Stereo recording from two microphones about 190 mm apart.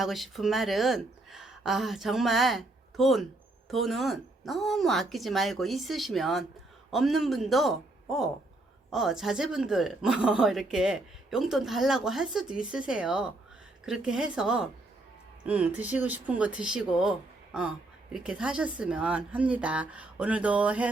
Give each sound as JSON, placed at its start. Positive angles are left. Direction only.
{"t": 0.0, "sound": "a woman's voice", "side_deg": 0}